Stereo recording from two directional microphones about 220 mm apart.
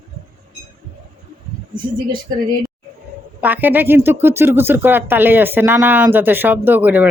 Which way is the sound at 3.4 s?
10° right (ahead or behind).